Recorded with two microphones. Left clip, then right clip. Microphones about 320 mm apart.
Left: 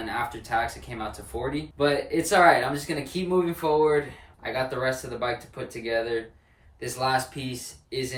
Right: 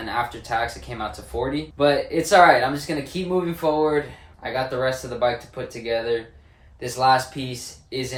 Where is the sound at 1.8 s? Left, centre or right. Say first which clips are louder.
Right 5 dB; centre.